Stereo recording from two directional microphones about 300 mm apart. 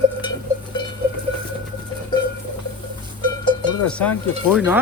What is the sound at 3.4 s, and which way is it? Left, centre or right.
Cowbell, centre.